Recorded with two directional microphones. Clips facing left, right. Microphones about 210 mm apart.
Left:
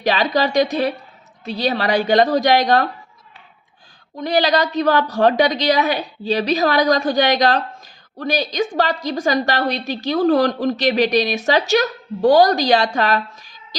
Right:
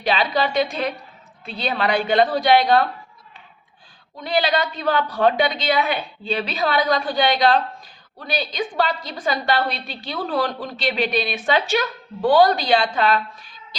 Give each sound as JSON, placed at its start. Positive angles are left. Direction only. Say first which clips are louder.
{"t": 0.0, "sound": "a woman's voice", "louder": "left 3 dB", "side_deg": 40}
{"t": 4.2, "sound": "a woman's voice", "louder": "left 4 dB", "side_deg": 40}